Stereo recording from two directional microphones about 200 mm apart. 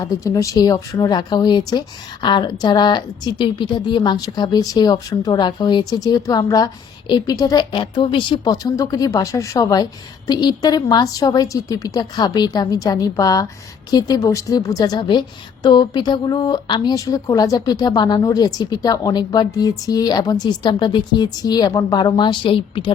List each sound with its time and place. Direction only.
0.0 s speech: 15° left (ahead or behind)